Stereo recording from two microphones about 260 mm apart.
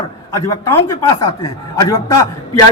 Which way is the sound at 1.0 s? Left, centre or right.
Centre.